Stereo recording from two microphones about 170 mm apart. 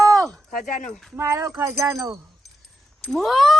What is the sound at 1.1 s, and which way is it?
Speech, 15° right (ahead or behind).